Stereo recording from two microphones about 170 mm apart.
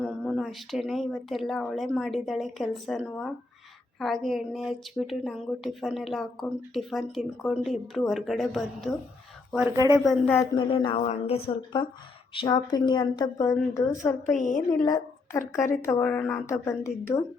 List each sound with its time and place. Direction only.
0.0 s a woman's voice: centre (ahead or behind)
9.7 s speech: 20° right (ahead or behind)
10.0 s a woman's voice: centre (ahead or behind)
10.5 s a woman's voice: 30° left (ahead or behind)
14.3 s a woman's voice: 50° left (ahead or behind)
14.7 s a woman's voice: 25° left (ahead or behind)